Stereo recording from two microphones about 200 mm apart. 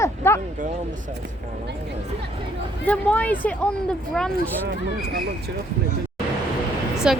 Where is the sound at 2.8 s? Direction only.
5° left (ahead or behind).